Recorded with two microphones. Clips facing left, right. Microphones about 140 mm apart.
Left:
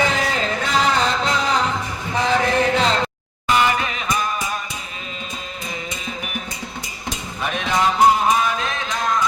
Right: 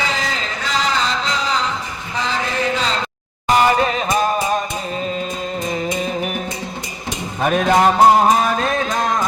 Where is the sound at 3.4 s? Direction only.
40° right (ahead or behind).